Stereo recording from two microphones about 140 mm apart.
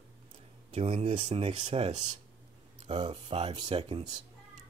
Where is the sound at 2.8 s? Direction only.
35° right (ahead or behind).